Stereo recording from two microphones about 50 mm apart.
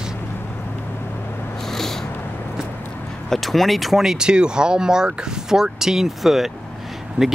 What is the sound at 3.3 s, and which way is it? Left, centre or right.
Speech, centre.